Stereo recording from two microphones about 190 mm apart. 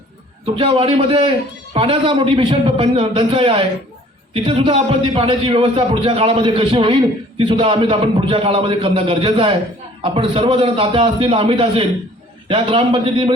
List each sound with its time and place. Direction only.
0.4 s a man's voice: 30° right (ahead or behind)